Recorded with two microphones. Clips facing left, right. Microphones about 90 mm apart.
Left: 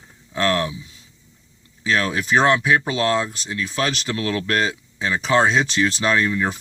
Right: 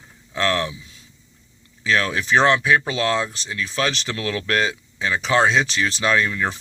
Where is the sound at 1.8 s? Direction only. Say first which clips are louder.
Even; 25° left (ahead or behind).